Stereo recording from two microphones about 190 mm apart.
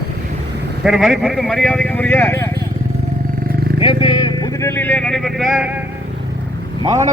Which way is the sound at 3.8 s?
25° left (ahead or behind).